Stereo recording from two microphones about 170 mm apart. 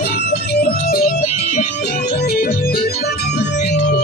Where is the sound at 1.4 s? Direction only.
45° left (ahead or behind).